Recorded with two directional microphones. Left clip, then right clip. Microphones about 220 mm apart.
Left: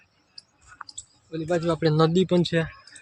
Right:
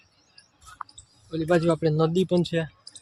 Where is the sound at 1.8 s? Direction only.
10° left (ahead or behind).